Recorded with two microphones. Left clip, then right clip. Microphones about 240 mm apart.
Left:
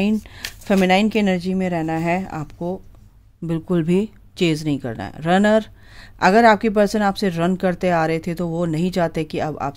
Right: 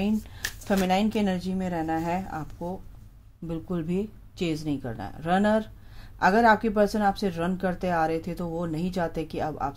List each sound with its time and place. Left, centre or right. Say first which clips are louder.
0.7 s speech: left 8 dB; left